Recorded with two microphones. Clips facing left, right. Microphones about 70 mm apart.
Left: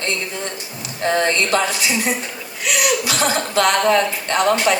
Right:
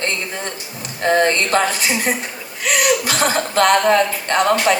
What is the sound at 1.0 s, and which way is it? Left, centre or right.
A woman's voice, right.